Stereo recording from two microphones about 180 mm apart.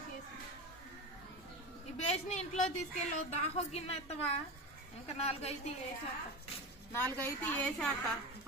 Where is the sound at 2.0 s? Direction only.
40° left (ahead or behind).